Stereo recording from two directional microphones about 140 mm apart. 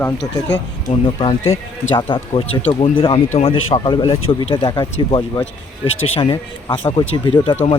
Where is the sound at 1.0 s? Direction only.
40° left (ahead or behind).